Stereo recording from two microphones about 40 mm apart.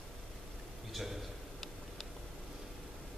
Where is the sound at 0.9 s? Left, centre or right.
Centre.